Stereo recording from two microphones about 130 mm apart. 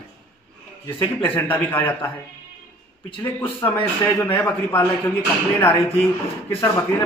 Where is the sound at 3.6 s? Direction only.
25° left (ahead or behind).